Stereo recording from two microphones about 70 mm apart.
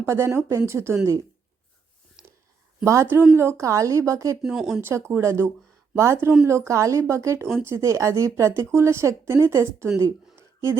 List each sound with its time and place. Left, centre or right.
0.0 s a woman's voice: right
2.2 s a sound: centre
2.8 s a woman's voice: right
4.4 s speech: centre
4.8 s a woman's voice: right